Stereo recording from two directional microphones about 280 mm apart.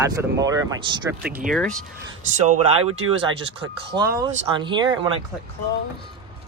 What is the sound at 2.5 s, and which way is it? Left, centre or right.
Speech, right.